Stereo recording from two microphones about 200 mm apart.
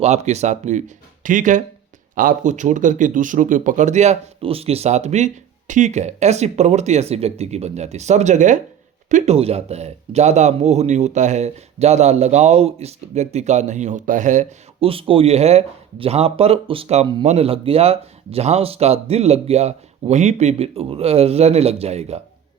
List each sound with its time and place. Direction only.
0.0 s speech: 35° right (ahead or behind)